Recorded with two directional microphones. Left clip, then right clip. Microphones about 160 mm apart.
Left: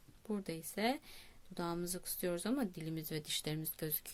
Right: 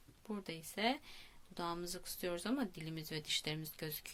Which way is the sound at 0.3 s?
40° left (ahead or behind).